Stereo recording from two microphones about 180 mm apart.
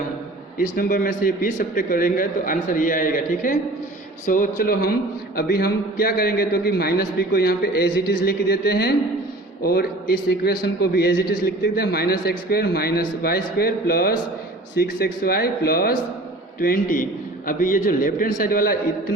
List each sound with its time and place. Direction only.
0.6 s a man's voice: 50° left (ahead or behind)